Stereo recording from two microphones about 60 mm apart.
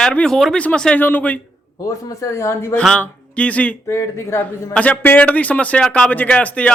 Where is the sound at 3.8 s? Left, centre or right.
Left.